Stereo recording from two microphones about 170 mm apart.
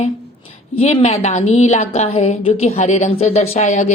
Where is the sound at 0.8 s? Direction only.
35° left (ahead or behind).